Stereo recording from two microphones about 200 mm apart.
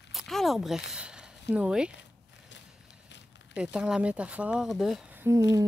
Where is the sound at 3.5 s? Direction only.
5° right (ahead or behind).